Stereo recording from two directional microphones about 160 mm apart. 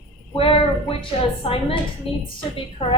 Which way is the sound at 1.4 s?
35° left (ahead or behind).